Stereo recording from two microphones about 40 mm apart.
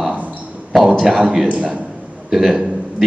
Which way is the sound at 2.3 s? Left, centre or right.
Centre.